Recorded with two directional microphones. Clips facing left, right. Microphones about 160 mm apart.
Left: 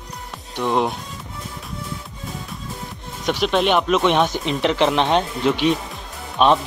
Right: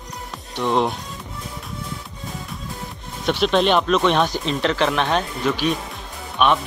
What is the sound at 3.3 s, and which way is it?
Speech, 10° left (ahead or behind).